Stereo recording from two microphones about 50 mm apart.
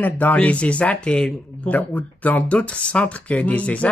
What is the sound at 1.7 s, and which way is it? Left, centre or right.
Speech, left.